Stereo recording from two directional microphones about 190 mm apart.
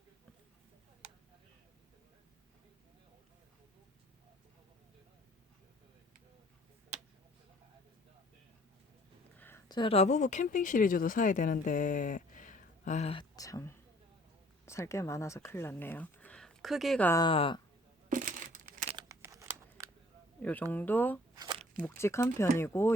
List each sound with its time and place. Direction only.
9.6 s speech: 25° left (ahead or behind)
13.3 s speech: 15° left (ahead or behind); by 17.1 s centre (ahead or behind)
17.1 s speech: 20° left (ahead or behind)
18.1 s crumpling: 45° right (ahead or behind)
19.0 s shuffling cards: 15° right (ahead or behind)
20.4 s speech: 10° left (ahead or behind)
21.3 s a sound: 20° right (ahead or behind)
21.8 s speech: 10° left (ahead or behind)